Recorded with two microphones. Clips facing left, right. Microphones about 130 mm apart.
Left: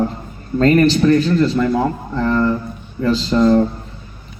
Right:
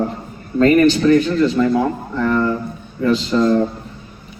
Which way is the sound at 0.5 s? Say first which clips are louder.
Right 1 dB; 40° left (ahead or behind).